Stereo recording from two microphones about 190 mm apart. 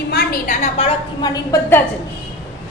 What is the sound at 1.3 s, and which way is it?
Speech, 15° left (ahead or behind).